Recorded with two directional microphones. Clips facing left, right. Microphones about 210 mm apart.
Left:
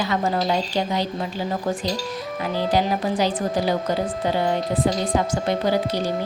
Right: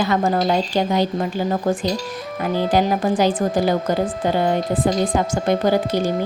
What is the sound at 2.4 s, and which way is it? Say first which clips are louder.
Speech: right 4 dB; 50° right (ahead or behind).